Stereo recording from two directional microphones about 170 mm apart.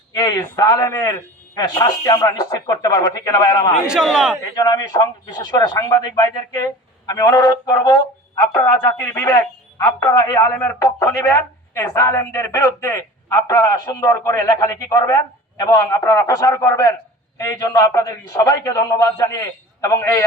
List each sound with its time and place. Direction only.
0.1 s a man's voice: 25° left (ahead or behind)
3.8 s a man's voice: 5° right (ahead or behind)
4.5 s a man's voice: 20° left (ahead or behind)
8.5 s a man's voice: 15° left (ahead or behind)